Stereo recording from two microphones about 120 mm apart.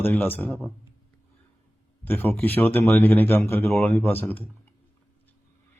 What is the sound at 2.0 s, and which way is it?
Speech, 15° left (ahead or behind).